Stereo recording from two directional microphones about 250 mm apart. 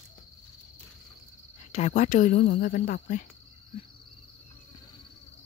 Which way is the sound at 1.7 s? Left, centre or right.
Left.